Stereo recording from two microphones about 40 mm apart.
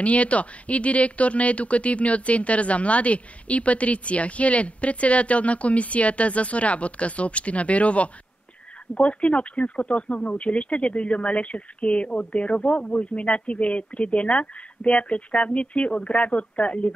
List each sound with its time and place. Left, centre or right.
0.0 s speech: left